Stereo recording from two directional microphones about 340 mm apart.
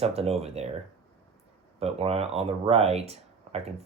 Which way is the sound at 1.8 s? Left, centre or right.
Centre.